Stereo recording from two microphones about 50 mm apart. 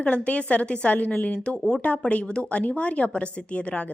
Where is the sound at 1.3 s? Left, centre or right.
Left.